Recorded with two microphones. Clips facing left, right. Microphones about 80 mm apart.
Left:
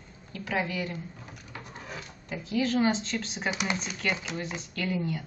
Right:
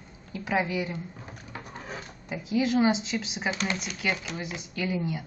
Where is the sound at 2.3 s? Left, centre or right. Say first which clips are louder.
Right 2 dB; centre.